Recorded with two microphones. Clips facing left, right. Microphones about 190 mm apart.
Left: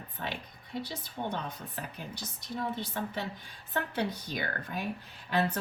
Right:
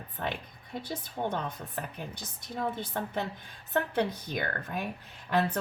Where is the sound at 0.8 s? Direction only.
50° right (ahead or behind).